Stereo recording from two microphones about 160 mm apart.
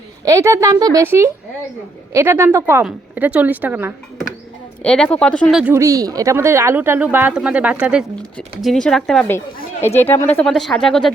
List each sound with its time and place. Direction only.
0.3 s speech: 20° right (ahead or behind)
4.8 s speech: 5° left (ahead or behind)
5.7 s speech: 20° right (ahead or behind)
8.4 s speech: 5° left (ahead or behind)
10.0 s speech: 10° left (ahead or behind)